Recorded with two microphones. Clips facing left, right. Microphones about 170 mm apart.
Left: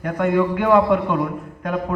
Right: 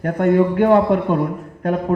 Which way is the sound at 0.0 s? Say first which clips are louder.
Right 3 dB; 45° right (ahead or behind).